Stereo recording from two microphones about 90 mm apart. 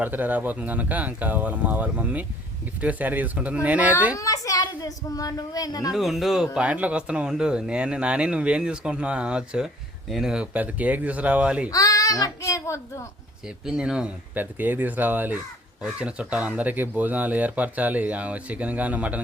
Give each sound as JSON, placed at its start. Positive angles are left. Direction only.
{"t": 0.0, "sound": "speech", "side_deg": -20}
{"t": 4.1, "sound": "a child's voice", "side_deg": 40}
{"t": 5.9, "sound": "speech", "side_deg": -5}
{"t": 11.7, "sound": "a child's voice", "side_deg": 40}
{"t": 13.7, "sound": "speech", "side_deg": -5}
{"t": 14.3, "sound": "speech", "side_deg": -20}